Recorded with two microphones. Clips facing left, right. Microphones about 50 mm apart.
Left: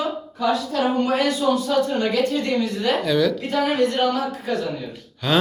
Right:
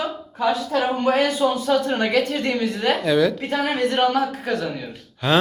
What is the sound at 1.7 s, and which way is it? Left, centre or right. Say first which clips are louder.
A woman's voice: right 1 dB; right.